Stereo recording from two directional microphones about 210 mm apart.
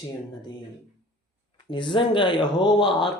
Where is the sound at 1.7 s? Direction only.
25° left (ahead or behind).